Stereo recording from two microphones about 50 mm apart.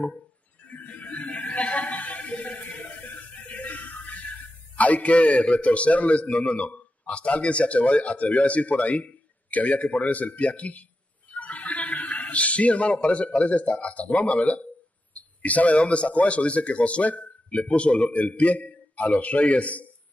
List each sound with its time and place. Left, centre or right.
0.7 s music: left
4.7 s a man's voice: left